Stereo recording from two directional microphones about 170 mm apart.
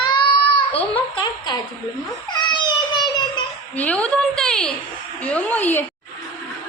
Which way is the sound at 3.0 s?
25° left (ahead or behind).